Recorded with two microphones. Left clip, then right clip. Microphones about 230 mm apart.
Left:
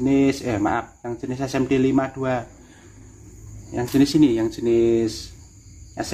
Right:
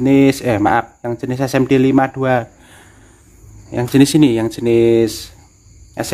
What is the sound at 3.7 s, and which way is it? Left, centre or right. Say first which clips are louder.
Speech: right 7 dB; right.